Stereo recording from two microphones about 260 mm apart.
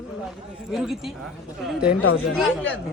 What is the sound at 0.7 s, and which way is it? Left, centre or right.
A woman's voice, centre.